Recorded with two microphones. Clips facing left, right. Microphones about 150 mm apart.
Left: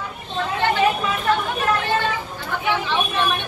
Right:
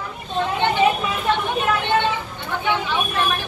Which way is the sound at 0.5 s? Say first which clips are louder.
Left 1 dB; 20° right (ahead or behind).